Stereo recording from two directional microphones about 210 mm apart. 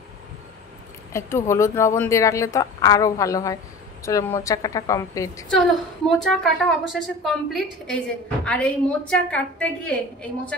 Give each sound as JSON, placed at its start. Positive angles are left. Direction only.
{"t": 1.1, "sound": "a woman's voice", "side_deg": 15}
{"t": 5.5, "sound": "a woman's voice", "side_deg": 0}